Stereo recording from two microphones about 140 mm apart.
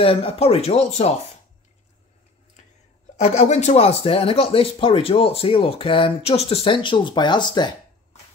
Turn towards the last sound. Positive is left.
turn(degrees=30)  # may be behind; listen again after turning